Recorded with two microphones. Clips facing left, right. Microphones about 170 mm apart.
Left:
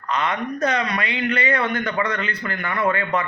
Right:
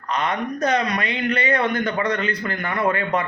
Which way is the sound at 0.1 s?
40° right (ahead or behind).